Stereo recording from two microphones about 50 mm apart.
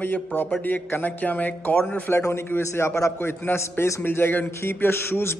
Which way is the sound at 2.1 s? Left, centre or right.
Left.